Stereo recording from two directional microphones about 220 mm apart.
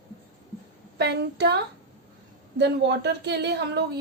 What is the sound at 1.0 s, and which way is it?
A woman's voice, 50° right (ahead or behind).